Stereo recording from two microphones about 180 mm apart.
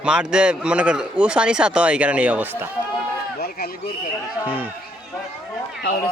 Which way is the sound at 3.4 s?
55° left (ahead or behind).